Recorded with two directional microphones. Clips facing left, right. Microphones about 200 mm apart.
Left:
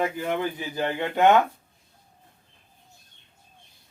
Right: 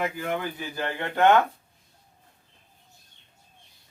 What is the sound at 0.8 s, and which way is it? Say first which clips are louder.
Speech: left 2 dB; 20° left (ahead or behind).